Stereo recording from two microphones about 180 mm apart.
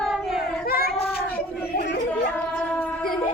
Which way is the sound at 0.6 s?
55° left (ahead or behind).